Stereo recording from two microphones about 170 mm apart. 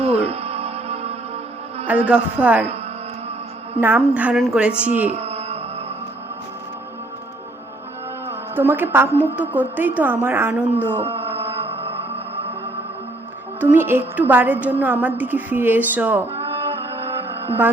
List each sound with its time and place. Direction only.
0.0 s music: 35° right (ahead or behind)
1.9 s a woman's voice: 10° right (ahead or behind)
3.8 s a woman's voice: 10° right (ahead or behind)
5.1 s music: 35° right (ahead or behind)
8.3 s a woman's voice: 10° right (ahead or behind)
11.6 s music: 35° right (ahead or behind)
13.6 s a woman's voice: 15° right (ahead or behind)